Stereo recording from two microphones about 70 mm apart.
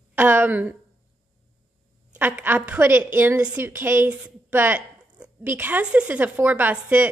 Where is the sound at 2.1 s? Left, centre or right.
Right.